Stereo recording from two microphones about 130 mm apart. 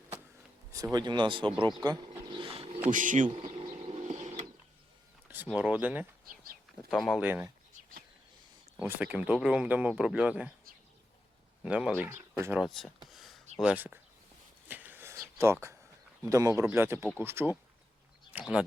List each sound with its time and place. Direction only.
0.9 s speech: 35° right (ahead or behind)
2.4 s a sound: 45° right (ahead or behind)
2.9 s speech: 85° right
4.0 s printer: 65° right (ahead or behind)
5.5 s speech: 10° right (ahead or behind)
6.9 s speech: centre (ahead or behind)
7.2 s speech: 15° right (ahead or behind)
8.8 s speech: 10° right (ahead or behind)
11.6 s speech: 10° right (ahead or behind)
12.6 s speech: centre (ahead or behind)
13.1 s a sound: centre (ahead or behind)
13.6 s speech: 10° right (ahead or behind)
14.7 s a sound: 15° right (ahead or behind)
16.2 s speech: 25° right (ahead or behind); by 18.6 s 10° right (ahead or behind)